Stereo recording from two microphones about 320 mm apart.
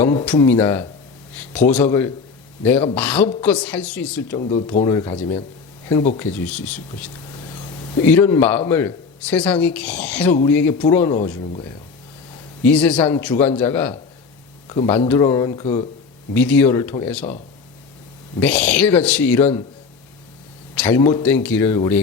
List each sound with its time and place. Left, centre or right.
0.0 s a man's voice: centre
4.4 s a man's voice: centre
12.6 s a man's voice: centre
16.3 s speech: centre
18.3 s speech: centre
20.7 s speech: centre